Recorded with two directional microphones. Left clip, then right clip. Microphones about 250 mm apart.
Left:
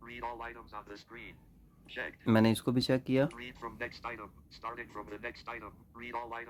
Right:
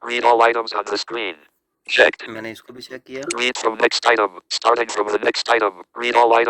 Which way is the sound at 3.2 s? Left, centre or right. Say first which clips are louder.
Right 19 dB; right.